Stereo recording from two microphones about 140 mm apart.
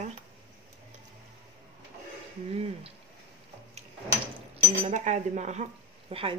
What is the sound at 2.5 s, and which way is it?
Speech, 45° right (ahead or behind).